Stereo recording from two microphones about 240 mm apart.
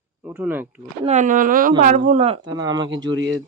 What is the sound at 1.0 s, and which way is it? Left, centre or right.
Speech, right.